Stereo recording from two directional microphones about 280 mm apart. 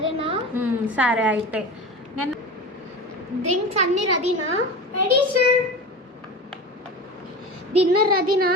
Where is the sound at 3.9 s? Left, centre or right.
Right.